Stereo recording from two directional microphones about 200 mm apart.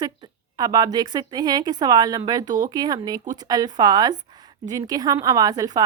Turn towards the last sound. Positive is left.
turn(degrees=-15)  # may be behind; listen again after turning